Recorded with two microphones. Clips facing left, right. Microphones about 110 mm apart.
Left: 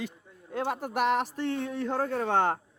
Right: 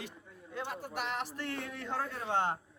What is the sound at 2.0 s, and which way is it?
Speech, 60° left (ahead or behind).